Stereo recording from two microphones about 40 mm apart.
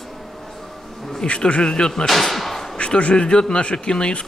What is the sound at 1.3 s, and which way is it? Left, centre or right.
Speech, left.